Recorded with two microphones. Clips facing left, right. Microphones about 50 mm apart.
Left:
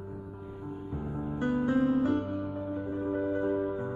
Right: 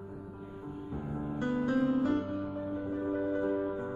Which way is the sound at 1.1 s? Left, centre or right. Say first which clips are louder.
Left 3 dB; left.